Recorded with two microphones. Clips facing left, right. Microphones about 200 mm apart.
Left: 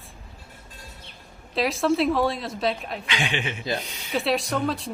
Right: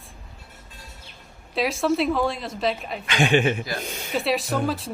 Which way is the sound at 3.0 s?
45° right (ahead or behind).